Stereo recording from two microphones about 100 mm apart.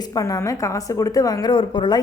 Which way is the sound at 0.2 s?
35° left (ahead or behind).